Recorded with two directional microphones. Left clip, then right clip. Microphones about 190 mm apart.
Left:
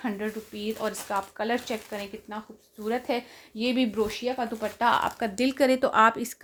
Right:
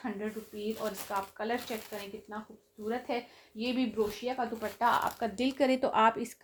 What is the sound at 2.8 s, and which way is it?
Speech, 45° left (ahead or behind).